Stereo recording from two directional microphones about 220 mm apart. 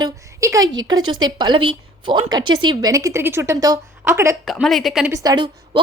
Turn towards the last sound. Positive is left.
turn(degrees=-20)  # may be behind; listen again after turning